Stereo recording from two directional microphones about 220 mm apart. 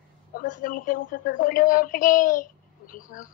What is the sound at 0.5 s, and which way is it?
Speech, 35° left (ahead or behind).